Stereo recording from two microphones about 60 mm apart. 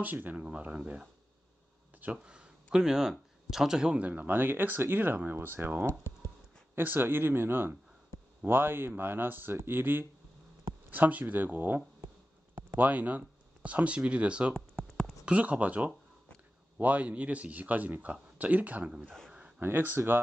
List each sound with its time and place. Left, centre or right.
0.0 s a man's voice: right
2.2 s speech: centre
4.0 s a man's voice: right
14.5 s a sound: centre
15.2 s a man's voice: right
19.0 s a sound: centre
19.6 s speech: right